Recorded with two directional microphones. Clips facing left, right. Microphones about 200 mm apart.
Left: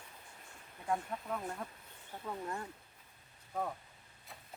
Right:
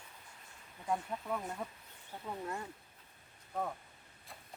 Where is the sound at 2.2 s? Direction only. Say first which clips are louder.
Even; 15° right (ahead or behind).